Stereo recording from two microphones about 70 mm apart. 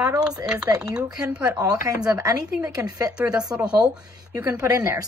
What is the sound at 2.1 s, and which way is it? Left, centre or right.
Speech, right.